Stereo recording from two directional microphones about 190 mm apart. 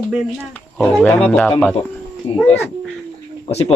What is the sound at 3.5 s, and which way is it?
Speech, 35° left (ahead or behind).